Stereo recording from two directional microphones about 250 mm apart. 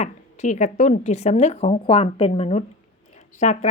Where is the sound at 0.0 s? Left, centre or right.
Left.